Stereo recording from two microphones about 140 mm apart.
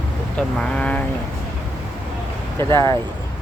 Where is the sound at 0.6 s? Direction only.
10° left (ahead or behind).